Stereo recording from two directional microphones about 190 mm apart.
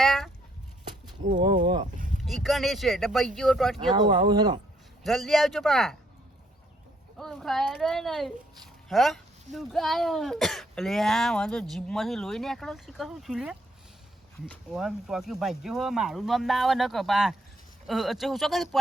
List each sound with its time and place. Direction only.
0.0 s a sound: centre (ahead or behind)
1.4 s speech: 25° right (ahead or behind)
2.2 s speech: centre (ahead or behind)
3.8 s speech: 25° right (ahead or behind)
5.0 s speech: centre (ahead or behind)
7.2 s speech: centre (ahead or behind)